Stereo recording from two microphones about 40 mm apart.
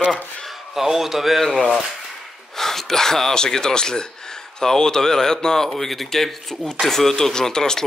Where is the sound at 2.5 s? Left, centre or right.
Centre.